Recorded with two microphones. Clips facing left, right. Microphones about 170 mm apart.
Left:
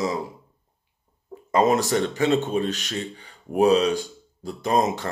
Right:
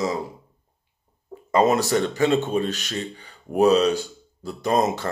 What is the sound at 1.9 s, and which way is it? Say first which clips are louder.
A man's voice: right 1 dB; 45° right (ahead or behind).